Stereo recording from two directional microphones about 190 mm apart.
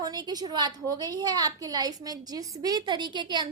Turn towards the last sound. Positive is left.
turn(degrees=-20)  # may be behind; listen again after turning